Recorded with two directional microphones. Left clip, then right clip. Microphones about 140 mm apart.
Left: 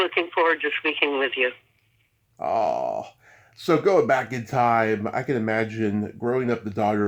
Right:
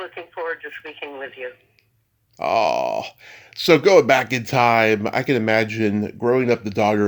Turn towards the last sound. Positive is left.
turn(degrees=-45)  # may be behind; listen again after turning